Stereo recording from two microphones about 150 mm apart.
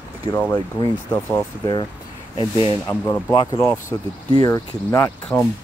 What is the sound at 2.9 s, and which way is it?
Speech, 15° left (ahead or behind).